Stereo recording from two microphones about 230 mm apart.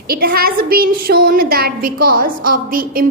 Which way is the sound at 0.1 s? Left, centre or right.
Right.